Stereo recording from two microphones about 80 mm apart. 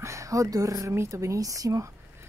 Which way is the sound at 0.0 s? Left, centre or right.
Right.